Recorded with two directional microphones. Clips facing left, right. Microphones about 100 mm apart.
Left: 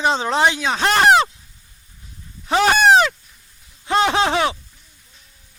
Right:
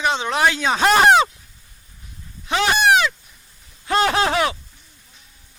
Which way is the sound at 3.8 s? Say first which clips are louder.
Left 1 dB; 20° left (ahead or behind).